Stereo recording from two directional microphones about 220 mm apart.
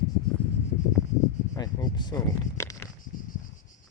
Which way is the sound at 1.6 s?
20° left (ahead or behind).